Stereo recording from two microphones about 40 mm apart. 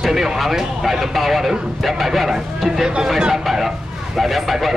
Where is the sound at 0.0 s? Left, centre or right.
Centre.